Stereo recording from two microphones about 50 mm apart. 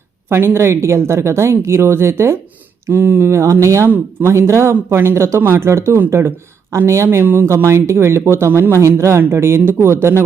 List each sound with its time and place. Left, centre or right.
0.3 s a woman's voice: right
2.8 s speech: right
4.7 s a woman's voice: right
9.8 s a woman's voice: right